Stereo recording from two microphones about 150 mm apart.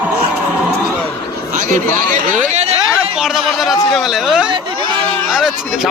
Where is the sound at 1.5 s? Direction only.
60° right (ahead or behind).